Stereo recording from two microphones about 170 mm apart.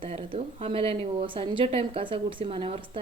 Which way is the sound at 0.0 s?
35° right (ahead or behind).